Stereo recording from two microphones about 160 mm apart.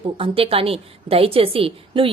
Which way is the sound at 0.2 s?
35° right (ahead or behind).